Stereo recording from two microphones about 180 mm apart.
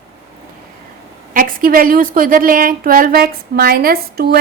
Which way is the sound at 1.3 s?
50° right (ahead or behind).